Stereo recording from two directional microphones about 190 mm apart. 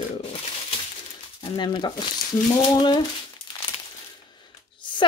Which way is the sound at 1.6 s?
25° left (ahead or behind).